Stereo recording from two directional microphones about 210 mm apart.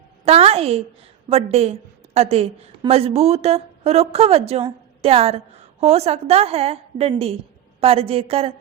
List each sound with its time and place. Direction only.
0.3 s a woman's voice: 30° right (ahead or behind)